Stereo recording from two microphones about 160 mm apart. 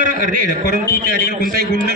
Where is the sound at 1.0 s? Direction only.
65° right (ahead or behind).